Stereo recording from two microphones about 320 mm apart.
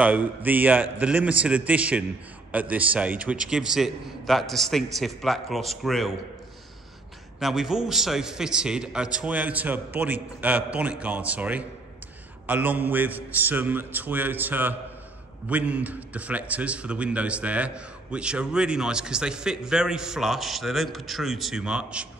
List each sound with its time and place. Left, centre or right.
0.0 s a man's voice: centre
7.3 s a man's voice: centre